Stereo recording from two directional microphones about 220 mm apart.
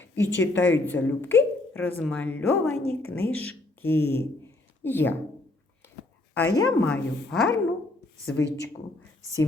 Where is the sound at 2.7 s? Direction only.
30° right (ahead or behind).